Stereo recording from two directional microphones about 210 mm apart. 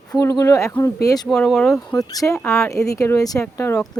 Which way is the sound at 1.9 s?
15° left (ahead or behind).